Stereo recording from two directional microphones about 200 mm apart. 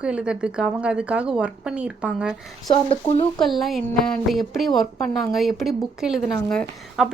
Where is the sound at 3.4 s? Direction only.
Centre (ahead or behind).